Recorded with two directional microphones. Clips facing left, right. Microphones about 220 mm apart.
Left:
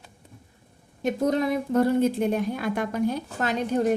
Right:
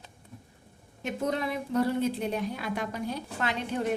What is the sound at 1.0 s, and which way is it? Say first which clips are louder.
A woman's voice: left 7 dB; 40° left (ahead or behind).